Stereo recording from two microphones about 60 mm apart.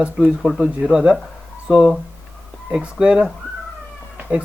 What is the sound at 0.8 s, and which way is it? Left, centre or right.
Speech, centre.